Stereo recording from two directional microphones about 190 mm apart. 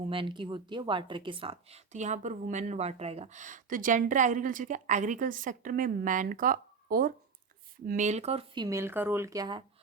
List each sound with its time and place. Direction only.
0.0 s a woman's voice: 25° right (ahead or behind)
8.6 s speech: 15° right (ahead or behind)